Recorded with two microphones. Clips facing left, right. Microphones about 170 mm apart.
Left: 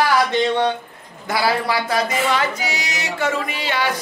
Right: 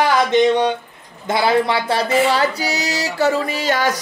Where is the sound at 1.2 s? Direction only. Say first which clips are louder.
Right 4 dB; 25° right (ahead or behind).